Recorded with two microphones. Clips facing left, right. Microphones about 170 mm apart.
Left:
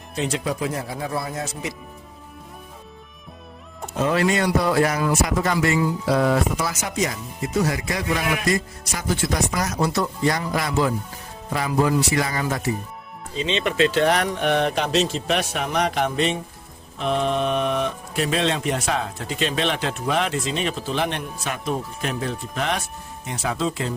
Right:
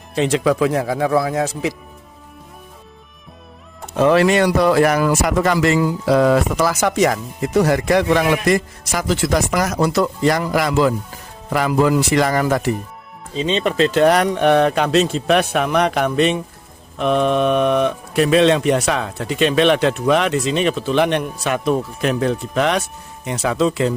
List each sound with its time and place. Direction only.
0.2 s speech: 90° right
3.9 s speech: 80° right
13.4 s speech: 40° right (ahead or behind)
14.8 s a man's voice: 60° right (ahead or behind); by 23.9 s 85° right